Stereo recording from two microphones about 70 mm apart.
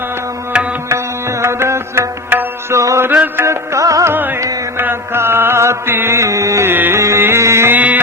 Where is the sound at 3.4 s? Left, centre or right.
Right.